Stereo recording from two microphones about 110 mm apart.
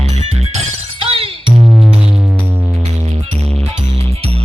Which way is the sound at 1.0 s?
55° right (ahead or behind).